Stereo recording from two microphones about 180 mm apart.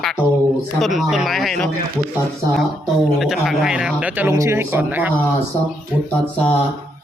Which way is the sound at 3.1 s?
Centre (ahead or behind).